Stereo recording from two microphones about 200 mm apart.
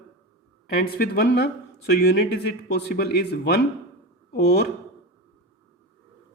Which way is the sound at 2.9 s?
55° left (ahead or behind).